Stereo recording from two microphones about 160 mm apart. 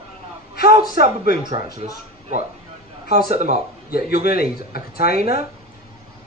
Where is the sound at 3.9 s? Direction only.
75° left (ahead or behind).